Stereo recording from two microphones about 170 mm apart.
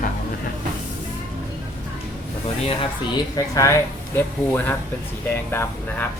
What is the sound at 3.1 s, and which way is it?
Speech, 20° left (ahead or behind).